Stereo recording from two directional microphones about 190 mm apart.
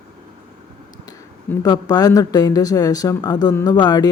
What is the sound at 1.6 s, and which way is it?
Speech, 20° left (ahead or behind).